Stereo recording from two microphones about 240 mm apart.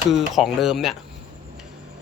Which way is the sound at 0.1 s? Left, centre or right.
Centre.